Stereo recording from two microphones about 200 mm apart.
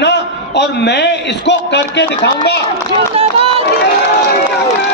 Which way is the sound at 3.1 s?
30° right (ahead or behind).